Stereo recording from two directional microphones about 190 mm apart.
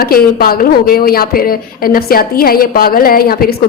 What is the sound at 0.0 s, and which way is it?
Speech, 50° left (ahead or behind).